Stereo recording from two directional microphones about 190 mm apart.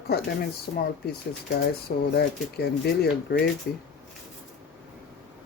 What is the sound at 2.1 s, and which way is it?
Speech, 60° left (ahead or behind).